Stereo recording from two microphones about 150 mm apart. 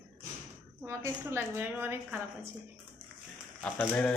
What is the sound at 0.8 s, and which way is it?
A woman's voice, 20° right (ahead or behind).